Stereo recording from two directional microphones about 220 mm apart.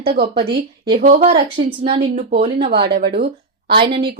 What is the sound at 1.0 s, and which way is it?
Speech, 30° right (ahead or behind).